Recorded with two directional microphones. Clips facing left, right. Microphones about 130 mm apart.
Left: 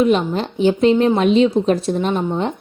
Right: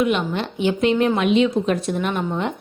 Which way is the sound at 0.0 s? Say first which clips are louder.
Left 4 dB; 35° left (ahead or behind).